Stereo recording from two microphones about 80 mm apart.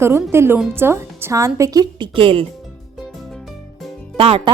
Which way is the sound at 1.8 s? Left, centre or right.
Right.